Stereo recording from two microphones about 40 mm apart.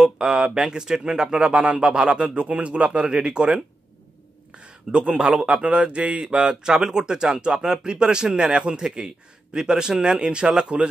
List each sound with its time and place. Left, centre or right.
0.0 s speech: centre
2.4 s speech: right
4.6 s speech: right
6.4 s speech: centre